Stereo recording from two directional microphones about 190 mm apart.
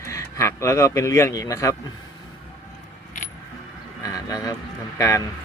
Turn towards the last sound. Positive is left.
turn(degrees=15)  # may be behind; listen again after turning